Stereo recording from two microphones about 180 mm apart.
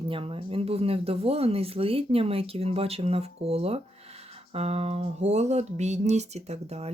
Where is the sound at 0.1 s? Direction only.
30° right (ahead or behind).